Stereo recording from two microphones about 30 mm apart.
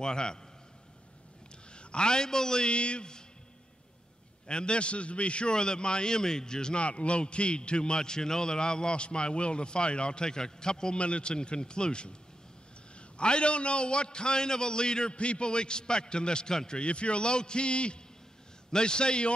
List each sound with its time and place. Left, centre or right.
0.0 s a man's voice: left
1.7 s a man's voice: left
2.7 s a man's voice: left
4.5 s a man's voice: left
5.5 s a man's voice: left
6.8 s a man's voice: left
11.0 s a man's voice: left
13.2 s a man's voice: left
16.8 s a man's voice: left